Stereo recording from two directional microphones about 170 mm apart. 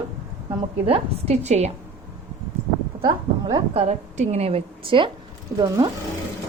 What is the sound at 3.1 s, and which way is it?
Speech, 25° right (ahead or behind).